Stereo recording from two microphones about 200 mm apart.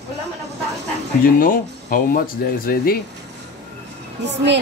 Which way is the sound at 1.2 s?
45° left (ahead or behind).